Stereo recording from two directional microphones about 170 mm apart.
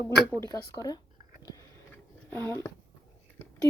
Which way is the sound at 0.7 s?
20° left (ahead or behind).